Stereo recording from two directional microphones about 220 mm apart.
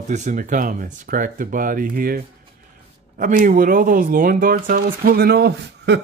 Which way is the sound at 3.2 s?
35° right (ahead or behind).